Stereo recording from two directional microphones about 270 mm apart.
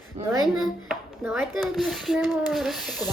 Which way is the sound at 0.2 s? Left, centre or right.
Right.